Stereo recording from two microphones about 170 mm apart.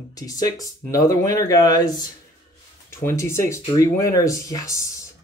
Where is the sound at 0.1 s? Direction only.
20° left (ahead or behind).